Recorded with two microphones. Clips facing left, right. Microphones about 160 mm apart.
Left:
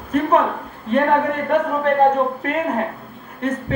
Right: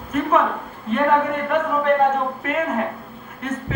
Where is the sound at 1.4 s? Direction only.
35° left (ahead or behind).